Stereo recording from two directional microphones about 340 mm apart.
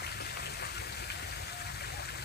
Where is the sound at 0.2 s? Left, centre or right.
Left.